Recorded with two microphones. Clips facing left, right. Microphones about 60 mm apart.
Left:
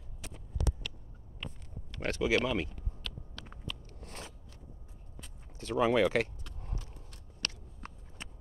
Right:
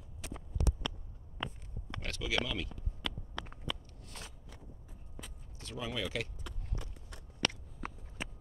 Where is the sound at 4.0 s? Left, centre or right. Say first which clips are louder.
Left 4 dB; left.